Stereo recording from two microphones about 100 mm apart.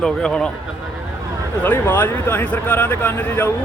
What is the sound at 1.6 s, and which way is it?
A man's voice, 20° left (ahead or behind).